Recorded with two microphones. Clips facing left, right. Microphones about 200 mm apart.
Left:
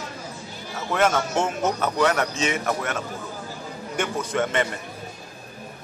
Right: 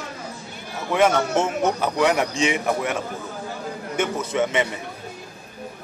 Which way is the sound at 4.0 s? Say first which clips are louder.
Right 2 dB; 5° right (ahead or behind).